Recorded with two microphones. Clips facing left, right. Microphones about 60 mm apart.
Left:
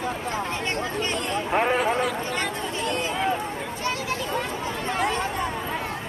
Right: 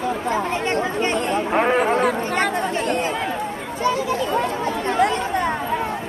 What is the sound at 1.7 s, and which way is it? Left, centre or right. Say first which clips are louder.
Chatter: right 5 dB; right.